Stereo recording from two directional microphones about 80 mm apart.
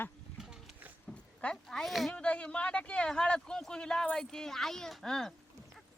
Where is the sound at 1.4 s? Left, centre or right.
Centre.